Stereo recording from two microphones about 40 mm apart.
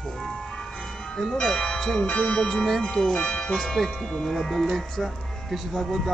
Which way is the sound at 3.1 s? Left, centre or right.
Left.